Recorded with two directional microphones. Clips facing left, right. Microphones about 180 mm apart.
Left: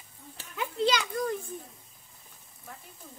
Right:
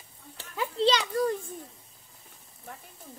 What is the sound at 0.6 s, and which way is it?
Children playing, 30° right (ahead or behind).